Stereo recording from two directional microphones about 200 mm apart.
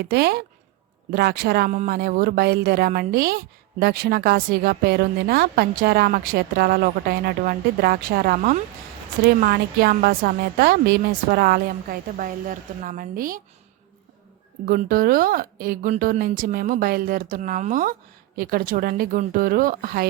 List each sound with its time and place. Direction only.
0.0 s speech: 55° right (ahead or behind)
14.7 s speech: 45° right (ahead or behind)